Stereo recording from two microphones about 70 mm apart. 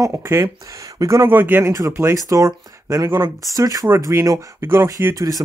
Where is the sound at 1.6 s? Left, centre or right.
Right.